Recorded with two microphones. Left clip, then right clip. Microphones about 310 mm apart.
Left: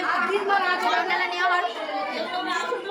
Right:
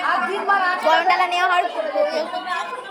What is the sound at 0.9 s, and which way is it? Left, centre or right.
Speech, centre.